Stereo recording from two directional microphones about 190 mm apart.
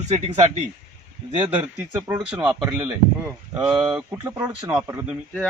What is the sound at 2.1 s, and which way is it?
Speech, 10° right (ahead or behind).